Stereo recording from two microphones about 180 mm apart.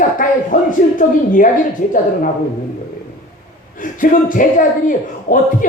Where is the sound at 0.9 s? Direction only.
45° left (ahead or behind).